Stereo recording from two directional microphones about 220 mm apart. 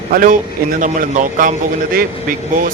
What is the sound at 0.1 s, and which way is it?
Speech, 40° right (ahead or behind).